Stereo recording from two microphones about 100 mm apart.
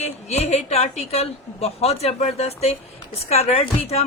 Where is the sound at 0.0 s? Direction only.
90° left.